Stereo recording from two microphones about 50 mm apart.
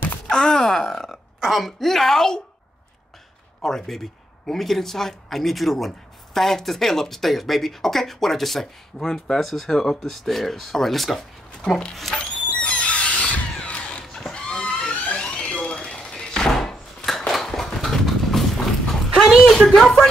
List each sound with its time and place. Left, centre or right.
0.3 s speech: centre
1.4 s a man's voice: centre
3.6 s a man's voice: centre
12.4 s a sound: left
14.3 s fire alarm: left
15.8 s a sound: centre
19.5 s speech: centre